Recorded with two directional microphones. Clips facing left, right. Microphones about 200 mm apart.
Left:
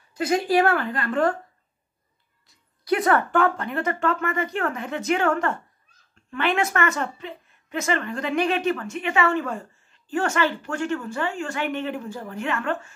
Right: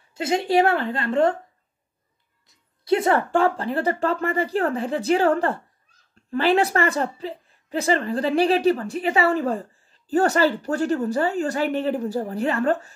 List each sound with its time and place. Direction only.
0.1 s a woman's voice: 25° right (ahead or behind)
2.8 s a woman's voice: 25° right (ahead or behind)